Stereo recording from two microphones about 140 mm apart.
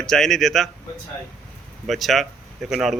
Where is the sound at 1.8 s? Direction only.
Centre (ahead or behind).